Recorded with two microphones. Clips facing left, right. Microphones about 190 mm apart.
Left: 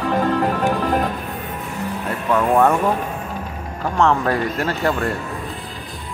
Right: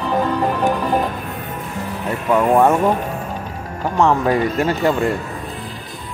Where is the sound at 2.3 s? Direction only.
15° right (ahead or behind).